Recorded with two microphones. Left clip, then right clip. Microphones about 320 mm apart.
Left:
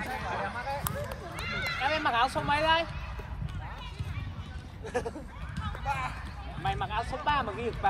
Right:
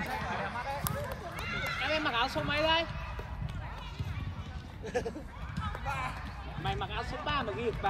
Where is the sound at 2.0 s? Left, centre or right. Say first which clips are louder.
Left 4 dB; centre.